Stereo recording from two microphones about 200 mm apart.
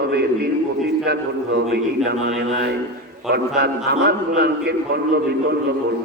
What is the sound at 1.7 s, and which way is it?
A man's voice, 55° right (ahead or behind).